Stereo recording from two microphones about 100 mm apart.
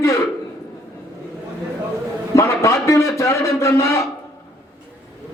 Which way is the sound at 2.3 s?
30° left (ahead or behind).